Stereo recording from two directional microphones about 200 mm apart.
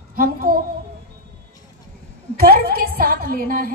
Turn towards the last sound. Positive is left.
turn(degrees=-45)  # may be behind; listen again after turning